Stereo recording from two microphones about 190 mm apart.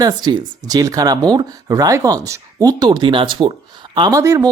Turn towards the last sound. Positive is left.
turn(degrees=-15)  # may be behind; listen again after turning